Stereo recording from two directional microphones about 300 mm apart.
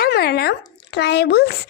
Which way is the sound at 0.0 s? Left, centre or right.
Left.